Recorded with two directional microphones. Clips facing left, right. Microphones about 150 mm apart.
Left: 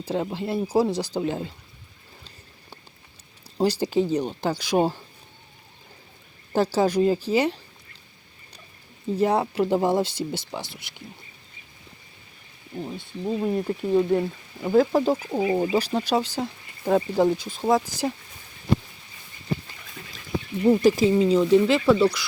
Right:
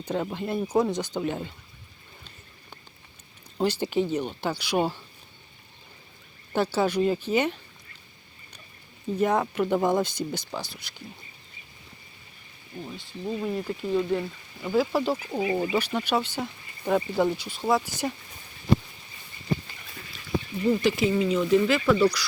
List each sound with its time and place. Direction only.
0.0 s speech: 25° left (ahead or behind)
3.6 s speech: 40° left (ahead or behind)
6.5 s speech: 40° left (ahead or behind)
9.1 s speech: 30° left (ahead or behind)
12.7 s speech: 25° left (ahead or behind)
14.8 s speech: 45° left (ahead or behind)
15.1 s speech: 20° left (ahead or behind)
15.7 s speech: 35° left (ahead or behind)
17.7 s speech: 40° left (ahead or behind)
20.7 s speech: 40° left (ahead or behind)
21.2 s speech: 30° left (ahead or behind)